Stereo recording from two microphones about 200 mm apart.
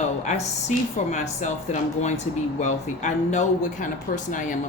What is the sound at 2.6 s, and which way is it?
Speech, 35° left (ahead or behind).